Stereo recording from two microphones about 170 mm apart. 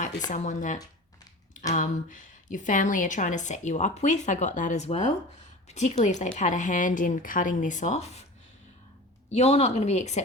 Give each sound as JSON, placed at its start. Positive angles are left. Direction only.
{"t": 0.3, "sound": "a woman's voice", "side_deg": 45}
{"t": 9.3, "sound": "a woman's voice", "side_deg": 40}